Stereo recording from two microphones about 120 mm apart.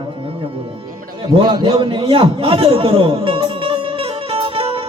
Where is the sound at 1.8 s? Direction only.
45° right (ahead or behind).